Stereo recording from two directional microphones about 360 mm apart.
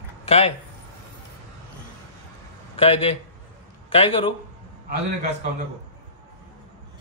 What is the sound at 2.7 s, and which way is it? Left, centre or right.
A man's voice, centre.